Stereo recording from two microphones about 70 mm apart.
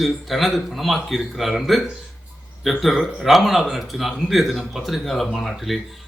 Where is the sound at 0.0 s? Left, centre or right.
Centre.